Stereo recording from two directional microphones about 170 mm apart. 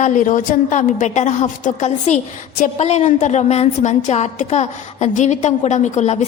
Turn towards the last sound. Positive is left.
turn(degrees=45)  # may be behind; listen again after turning